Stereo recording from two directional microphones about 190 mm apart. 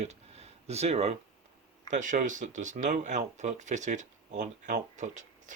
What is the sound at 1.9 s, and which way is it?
Speech, 40° right (ahead or behind).